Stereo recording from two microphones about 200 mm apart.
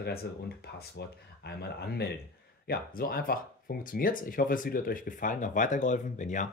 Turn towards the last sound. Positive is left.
turn(degrees=40)  # may be behind; listen again after turning